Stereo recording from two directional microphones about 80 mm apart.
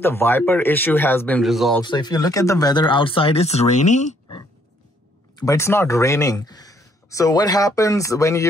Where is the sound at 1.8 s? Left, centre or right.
Left.